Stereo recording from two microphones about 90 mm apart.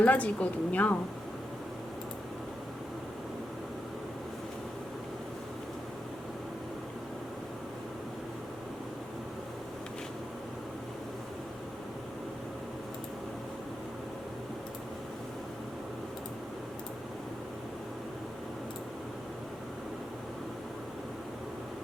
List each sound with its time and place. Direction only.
0.0 s a woman's voice: 15° left (ahead or behind)